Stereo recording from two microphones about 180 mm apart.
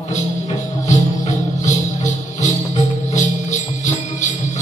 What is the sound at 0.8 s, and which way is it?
Music, 40° left (ahead or behind).